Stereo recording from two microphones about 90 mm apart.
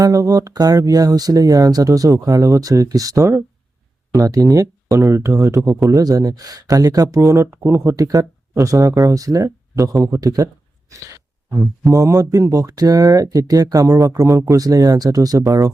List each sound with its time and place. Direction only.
0.0 s speech: 40° right (ahead or behind)
10.0 s a sound: 40° right (ahead or behind)
11.9 s speech: 40° right (ahead or behind)